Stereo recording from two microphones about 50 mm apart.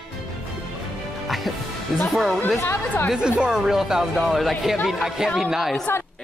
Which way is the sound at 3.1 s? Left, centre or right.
Centre.